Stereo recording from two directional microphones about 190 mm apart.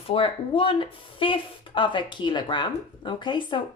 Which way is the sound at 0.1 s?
30° left (ahead or behind).